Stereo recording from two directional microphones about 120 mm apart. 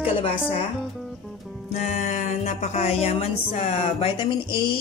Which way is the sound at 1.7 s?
90° left.